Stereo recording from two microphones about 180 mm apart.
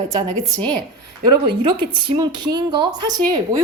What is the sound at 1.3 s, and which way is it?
Speech, 25° right (ahead or behind).